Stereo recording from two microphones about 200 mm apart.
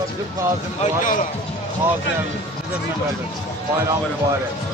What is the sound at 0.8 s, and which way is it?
Speech, 40° left (ahead or behind).